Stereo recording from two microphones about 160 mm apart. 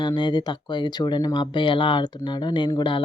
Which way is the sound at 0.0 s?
30° left (ahead or behind).